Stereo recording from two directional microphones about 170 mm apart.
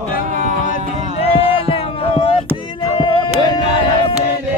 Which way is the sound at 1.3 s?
35° left (ahead or behind).